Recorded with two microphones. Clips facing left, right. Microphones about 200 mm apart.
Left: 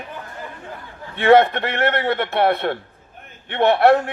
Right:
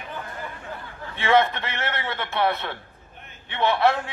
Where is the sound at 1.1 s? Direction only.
55° left (ahead or behind).